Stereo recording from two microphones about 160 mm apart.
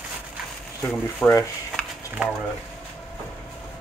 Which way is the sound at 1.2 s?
15° left (ahead or behind).